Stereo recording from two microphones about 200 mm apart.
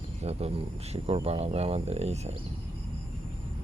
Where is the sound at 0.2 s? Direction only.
30° right (ahead or behind).